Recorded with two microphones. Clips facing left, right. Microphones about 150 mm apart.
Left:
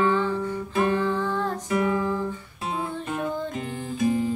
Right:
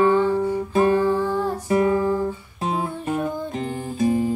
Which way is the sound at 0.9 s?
15° right (ahead or behind).